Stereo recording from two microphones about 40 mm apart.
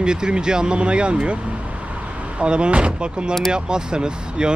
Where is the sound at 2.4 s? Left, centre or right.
Right.